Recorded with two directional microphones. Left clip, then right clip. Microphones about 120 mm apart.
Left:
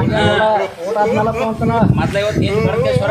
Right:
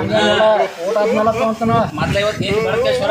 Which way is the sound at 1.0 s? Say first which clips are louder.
Right 1 dB; centre (ahead or behind).